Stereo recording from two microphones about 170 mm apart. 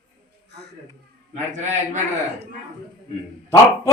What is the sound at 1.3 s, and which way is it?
Speech, 45° right (ahead or behind).